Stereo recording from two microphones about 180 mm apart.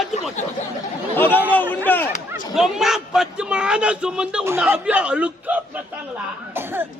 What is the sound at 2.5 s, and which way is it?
A man's voice, centre (ahead or behind).